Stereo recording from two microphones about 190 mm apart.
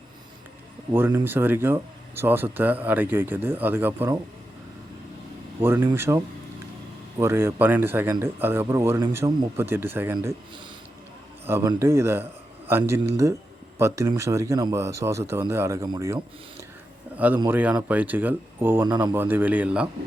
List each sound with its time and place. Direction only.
0.9 s speech: 10° right (ahead or behind)
5.5 s speech: 10° right (ahead or behind)
11.4 s a man's voice: 10° right (ahead or behind)